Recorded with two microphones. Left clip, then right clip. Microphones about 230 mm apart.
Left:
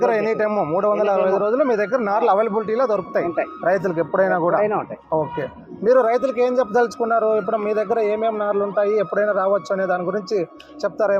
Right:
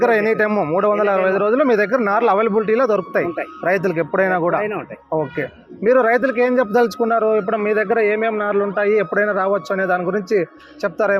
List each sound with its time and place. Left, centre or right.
0.0 s a man's voice: right
4.3 s speech: right
5.4 s a man's voice: right
6.0 s a man's voice: right